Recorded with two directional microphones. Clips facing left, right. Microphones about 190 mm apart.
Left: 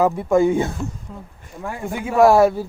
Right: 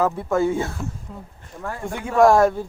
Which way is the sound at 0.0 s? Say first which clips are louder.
Left 4 dB; 15° left (ahead or behind).